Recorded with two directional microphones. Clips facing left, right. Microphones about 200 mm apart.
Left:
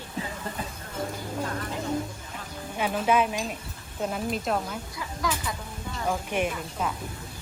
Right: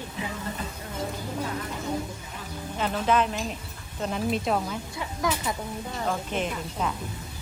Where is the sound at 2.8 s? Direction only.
10° left (ahead or behind).